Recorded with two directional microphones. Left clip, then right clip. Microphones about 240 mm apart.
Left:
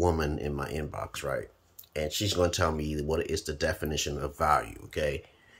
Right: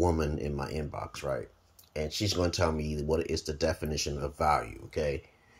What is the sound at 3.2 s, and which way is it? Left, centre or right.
Speech, left.